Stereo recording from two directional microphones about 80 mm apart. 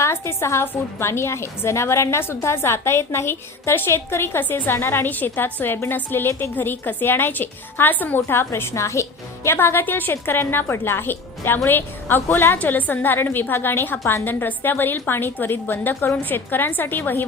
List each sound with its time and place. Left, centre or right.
0.0 s a woman's voice: left